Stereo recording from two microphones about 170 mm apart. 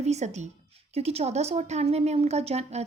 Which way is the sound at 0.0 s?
40° right (ahead or behind).